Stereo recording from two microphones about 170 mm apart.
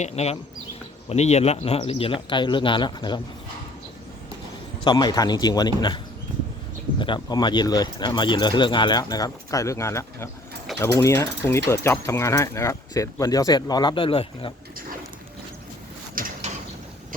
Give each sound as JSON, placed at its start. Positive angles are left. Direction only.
{"t": 0.0, "sound": "speech", "side_deg": 40}
{"t": 4.8, "sound": "speech", "side_deg": 25}
{"t": 7.0, "sound": "speech", "side_deg": 25}
{"t": 16.1, "sound": "mechanisms", "side_deg": -55}